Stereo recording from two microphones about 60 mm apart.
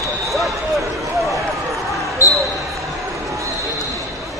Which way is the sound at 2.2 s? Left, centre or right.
Left.